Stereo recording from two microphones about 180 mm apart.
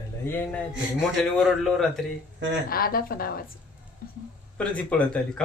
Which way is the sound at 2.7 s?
55° left (ahead or behind).